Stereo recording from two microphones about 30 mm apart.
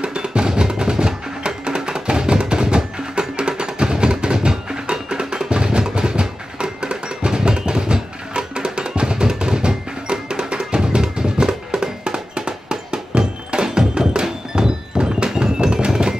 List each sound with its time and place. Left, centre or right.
0.0 s music: right